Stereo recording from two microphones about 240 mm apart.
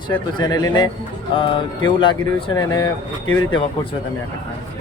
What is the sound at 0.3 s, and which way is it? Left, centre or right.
Speech, centre.